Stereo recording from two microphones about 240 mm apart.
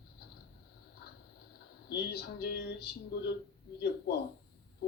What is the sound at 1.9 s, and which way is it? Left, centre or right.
A woman's voice, left.